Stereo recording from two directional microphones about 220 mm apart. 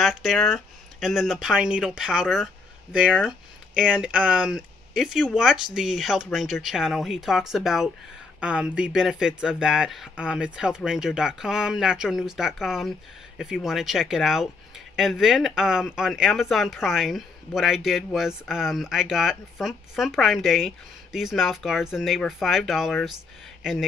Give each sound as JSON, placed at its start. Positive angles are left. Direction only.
{"t": 0.0, "sound": "speech", "side_deg": 0}